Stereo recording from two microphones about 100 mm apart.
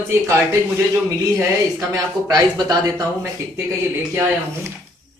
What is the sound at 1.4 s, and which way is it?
Speech, 30° right (ahead or behind).